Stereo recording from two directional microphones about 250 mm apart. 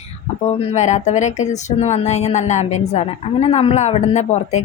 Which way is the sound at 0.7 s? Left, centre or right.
Left.